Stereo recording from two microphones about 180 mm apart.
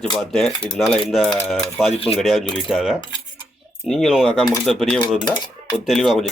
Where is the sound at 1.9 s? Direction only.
35° left (ahead or behind).